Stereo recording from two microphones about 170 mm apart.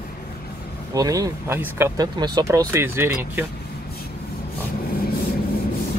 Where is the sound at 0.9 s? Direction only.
20° right (ahead or behind).